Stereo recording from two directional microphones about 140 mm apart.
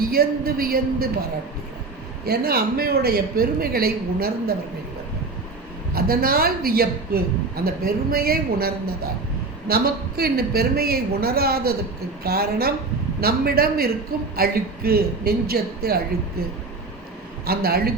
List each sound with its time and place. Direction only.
0.0 s a woman's voice: 90° right
2.4 s a woman's voice: 90° right
5.9 s a woman's voice: 90° right
17.4 s a woman's voice: 90° right